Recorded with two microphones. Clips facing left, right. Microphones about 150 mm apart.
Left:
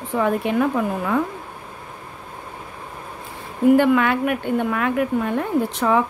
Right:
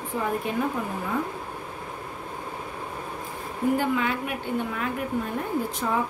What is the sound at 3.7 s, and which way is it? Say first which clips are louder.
A woman's voice: left 10 dB; 75° left (ahead or behind).